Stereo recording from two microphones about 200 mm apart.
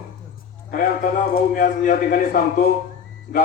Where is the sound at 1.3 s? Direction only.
45° left (ahead or behind).